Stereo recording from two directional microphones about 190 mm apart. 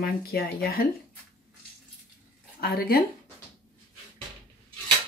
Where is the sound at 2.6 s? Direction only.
50° left (ahead or behind).